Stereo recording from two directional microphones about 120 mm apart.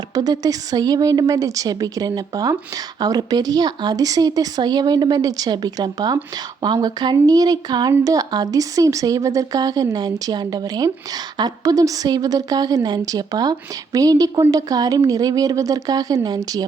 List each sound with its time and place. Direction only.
0.1 s speech: 30° right (ahead or behind)